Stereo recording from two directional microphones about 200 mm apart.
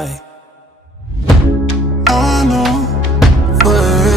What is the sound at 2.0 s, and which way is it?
Music, centre (ahead or behind).